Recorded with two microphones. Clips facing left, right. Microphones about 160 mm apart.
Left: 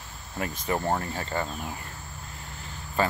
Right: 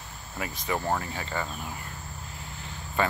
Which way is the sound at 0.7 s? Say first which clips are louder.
Left 1 dB; 25° left (ahead or behind).